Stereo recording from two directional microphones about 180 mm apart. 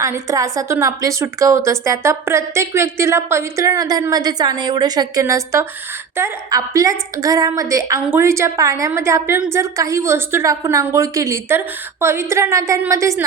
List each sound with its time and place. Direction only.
0.0 s a woman's voice: 15° right (ahead or behind)